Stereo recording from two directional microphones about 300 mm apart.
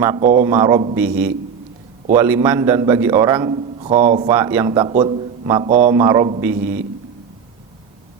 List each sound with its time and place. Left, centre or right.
0.0 s a man's voice: centre